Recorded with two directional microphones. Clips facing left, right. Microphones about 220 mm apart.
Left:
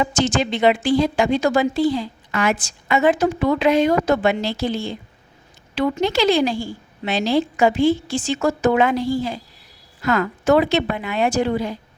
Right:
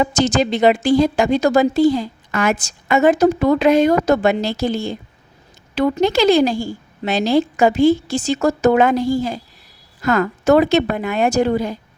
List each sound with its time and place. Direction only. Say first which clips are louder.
0.0 s a woman's voice: right 3 dB; 40° right (ahead or behind)